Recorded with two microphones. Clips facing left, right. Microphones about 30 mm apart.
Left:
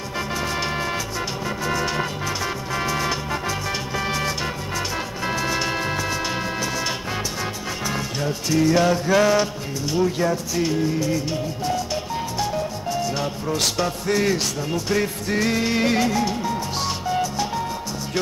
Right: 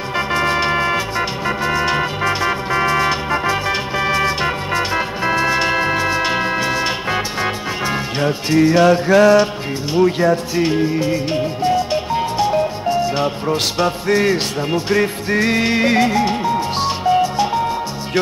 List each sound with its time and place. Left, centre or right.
0.3 s organ: right
0.6 s music: right
8.7 s a sound: right
10.0 s speech: right
10.5 s music: right